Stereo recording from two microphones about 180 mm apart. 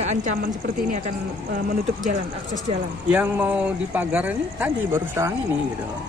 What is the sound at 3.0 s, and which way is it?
A man's voice, 10° right (ahead or behind).